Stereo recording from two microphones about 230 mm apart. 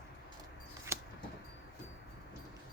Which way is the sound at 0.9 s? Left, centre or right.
Centre.